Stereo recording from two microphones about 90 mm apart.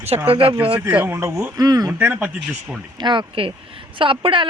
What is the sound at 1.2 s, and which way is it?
Speech, 35° right (ahead or behind).